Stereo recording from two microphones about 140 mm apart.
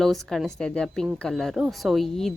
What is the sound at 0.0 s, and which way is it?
Speech, centre (ahead or behind).